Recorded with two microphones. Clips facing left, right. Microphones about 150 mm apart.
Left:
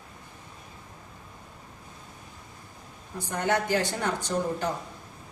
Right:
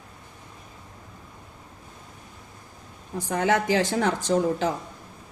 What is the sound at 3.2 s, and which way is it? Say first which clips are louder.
Speech: right 4 dB; 90° right.